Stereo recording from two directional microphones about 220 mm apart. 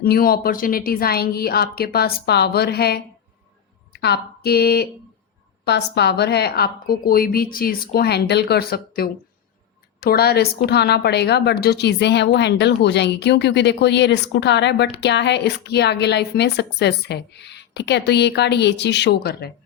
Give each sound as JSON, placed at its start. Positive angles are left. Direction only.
{"t": 0.0, "sound": "a woman's voice", "side_deg": 45}